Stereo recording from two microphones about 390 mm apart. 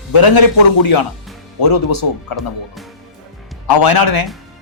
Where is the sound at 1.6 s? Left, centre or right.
Left.